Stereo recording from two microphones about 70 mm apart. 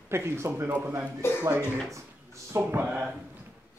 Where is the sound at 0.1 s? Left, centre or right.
Right.